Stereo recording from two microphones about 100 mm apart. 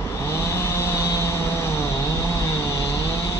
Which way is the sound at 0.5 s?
25° left (ahead or behind).